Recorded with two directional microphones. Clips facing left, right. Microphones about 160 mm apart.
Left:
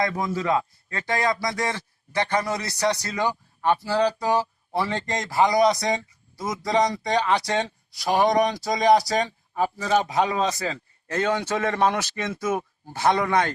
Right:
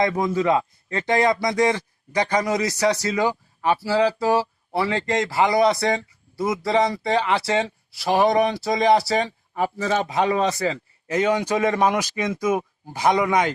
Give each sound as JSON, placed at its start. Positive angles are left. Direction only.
{"t": 0.0, "sound": "speech", "side_deg": -20}